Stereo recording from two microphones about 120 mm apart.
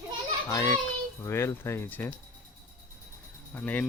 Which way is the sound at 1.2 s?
20° left (ahead or behind).